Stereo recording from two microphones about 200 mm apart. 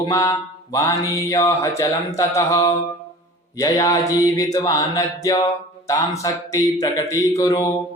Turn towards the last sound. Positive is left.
turn(degrees=15)  # may be behind; listen again after turning